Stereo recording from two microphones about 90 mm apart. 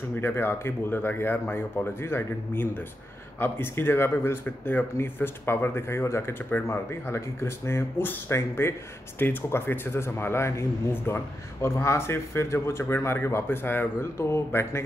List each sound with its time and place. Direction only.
0.1 s speech: 25° left (ahead or behind)